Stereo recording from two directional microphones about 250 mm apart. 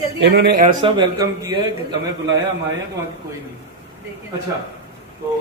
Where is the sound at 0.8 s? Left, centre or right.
Centre.